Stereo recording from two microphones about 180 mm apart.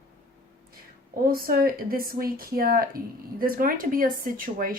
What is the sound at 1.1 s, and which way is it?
A woman's voice, 55° right (ahead or behind).